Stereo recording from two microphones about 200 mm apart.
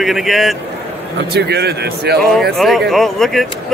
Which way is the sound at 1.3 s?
55° right (ahead or behind).